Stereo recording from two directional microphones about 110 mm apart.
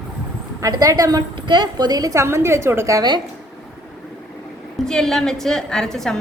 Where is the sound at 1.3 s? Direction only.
45° right (ahead or behind).